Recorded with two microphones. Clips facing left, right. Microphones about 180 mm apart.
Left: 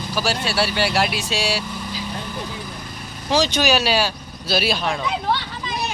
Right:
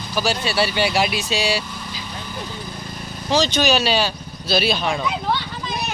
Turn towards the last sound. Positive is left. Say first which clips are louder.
# right 1 dB
turn(degrees=0)  # may be behind; listen again after turning